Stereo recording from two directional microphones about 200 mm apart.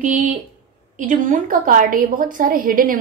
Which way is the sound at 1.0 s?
40° right (ahead or behind).